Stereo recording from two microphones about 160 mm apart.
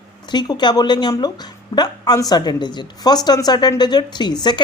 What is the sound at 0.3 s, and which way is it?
A woman's voice, 25° left (ahead or behind).